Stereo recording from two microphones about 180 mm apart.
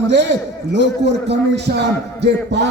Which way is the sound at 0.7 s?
75° right (ahead or behind).